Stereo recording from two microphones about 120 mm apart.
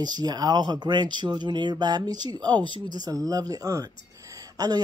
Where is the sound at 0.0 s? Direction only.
35° right (ahead or behind).